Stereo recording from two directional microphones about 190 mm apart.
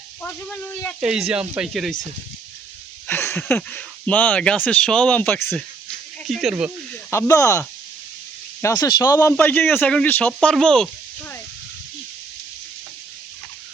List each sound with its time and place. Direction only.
0.2 s speech: 5° left (ahead or behind)
1.0 s speech: 5° right (ahead or behind)
3.1 s speech: 10° left (ahead or behind)
6.2 s speech: centre (ahead or behind)
6.9 s speech: 15° left (ahead or behind)